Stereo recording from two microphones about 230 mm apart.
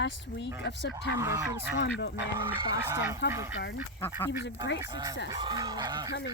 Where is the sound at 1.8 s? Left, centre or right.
Left.